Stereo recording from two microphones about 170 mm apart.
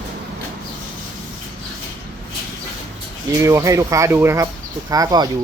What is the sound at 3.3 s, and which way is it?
Speech, 15° right (ahead or behind).